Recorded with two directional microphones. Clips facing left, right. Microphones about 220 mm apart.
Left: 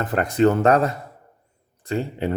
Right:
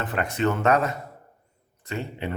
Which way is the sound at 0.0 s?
40° left (ahead or behind).